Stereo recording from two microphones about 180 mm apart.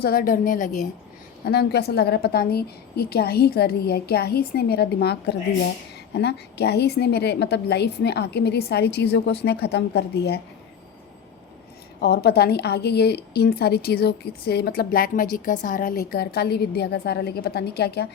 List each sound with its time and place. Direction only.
0.0 s a woman's voice: 55° left (ahead or behind)
1.5 s a woman's voice: 65° left (ahead or behind)
11.9 s a woman's voice: 65° left (ahead or behind)